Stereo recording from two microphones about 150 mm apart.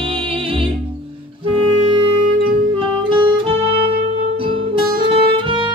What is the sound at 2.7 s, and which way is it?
Music, 35° right (ahead or behind).